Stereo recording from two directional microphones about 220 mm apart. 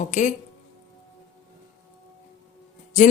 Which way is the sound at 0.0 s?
35° left (ahead or behind).